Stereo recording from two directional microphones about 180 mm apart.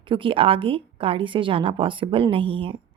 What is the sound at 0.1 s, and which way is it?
Speech, 30° right (ahead or behind).